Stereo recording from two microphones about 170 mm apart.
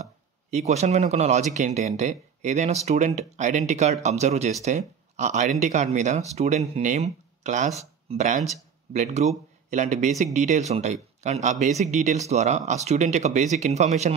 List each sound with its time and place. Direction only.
0.0 s speech: 40° right (ahead or behind)